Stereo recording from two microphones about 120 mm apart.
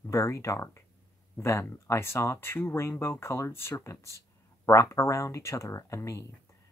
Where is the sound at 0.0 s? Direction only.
25° left (ahead or behind).